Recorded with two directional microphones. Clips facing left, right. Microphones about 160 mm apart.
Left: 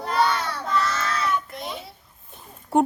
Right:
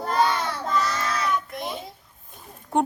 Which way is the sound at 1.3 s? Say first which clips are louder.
Even; centre (ahead or behind).